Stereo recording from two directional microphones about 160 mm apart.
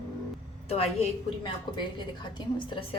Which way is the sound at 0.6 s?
40° left (ahead or behind).